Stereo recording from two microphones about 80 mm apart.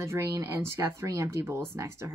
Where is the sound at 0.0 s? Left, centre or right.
Right.